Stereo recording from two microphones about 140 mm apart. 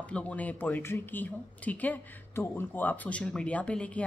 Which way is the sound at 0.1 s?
10° left (ahead or behind).